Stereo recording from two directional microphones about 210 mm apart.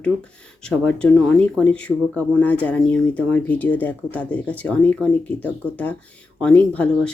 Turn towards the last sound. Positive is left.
turn(degrees=5)  # may be behind; listen again after turning